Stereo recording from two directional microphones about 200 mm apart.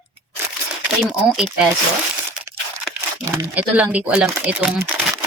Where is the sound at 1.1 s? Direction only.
5° right (ahead or behind).